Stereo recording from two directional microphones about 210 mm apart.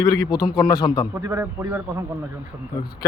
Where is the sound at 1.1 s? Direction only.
15° right (ahead or behind).